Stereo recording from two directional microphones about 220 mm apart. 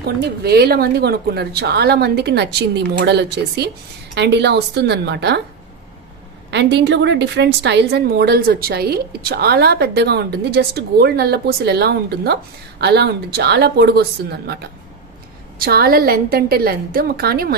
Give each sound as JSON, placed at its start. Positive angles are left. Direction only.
{"t": 0.0, "sound": "a woman's voice", "side_deg": -45}
{"t": 6.5, "sound": "a woman's voice", "side_deg": -50}
{"t": 15.6, "sound": "a woman's voice", "side_deg": -45}